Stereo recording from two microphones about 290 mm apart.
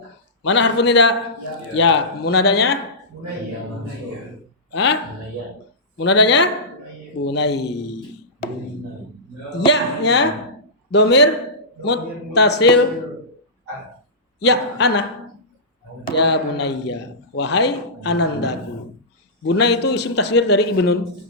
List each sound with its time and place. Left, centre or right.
0.4 s a man's voice: left
4.7 s speech: left
6.0 s a man's voice: left
9.5 s a man's voice: left
14.3 s a man's voice: left
16.1 s a man's voice: left
19.5 s a man's voice: left